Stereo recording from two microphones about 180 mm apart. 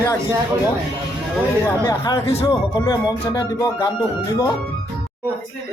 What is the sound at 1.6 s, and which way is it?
Music, 25° left (ahead or behind).